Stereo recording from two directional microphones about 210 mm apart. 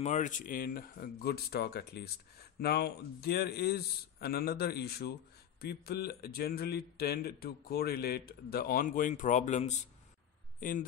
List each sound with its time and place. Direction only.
0.0 s a man's voice: 35° left (ahead or behind)